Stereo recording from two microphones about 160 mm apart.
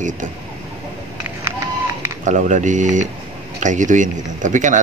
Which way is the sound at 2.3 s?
50° right (ahead or behind).